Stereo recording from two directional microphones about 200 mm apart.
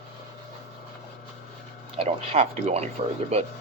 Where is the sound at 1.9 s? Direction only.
30° right (ahead or behind).